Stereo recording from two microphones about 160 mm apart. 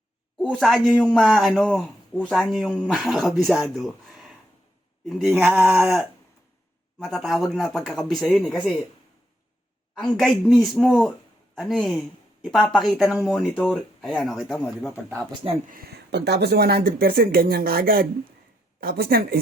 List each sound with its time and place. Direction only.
0.5 s a man's voice: centre (ahead or behind)
7.0 s a man's voice: centre (ahead or behind)
9.9 s a man's voice: centre (ahead or behind)
15.7 s speech: 80° right